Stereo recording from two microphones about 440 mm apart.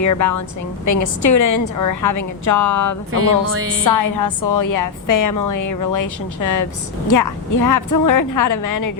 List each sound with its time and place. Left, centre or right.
0.0 s a woman's voice: left
3.1 s music: right
3.8 s a woman's voice: left